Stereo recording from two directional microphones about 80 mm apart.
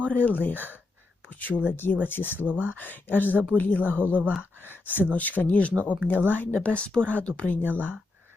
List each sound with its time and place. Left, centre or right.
0.1 s speech: left
2.5 s speech: centre
2.7 s speech: left